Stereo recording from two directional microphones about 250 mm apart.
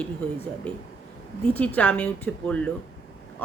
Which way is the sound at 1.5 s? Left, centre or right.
Centre.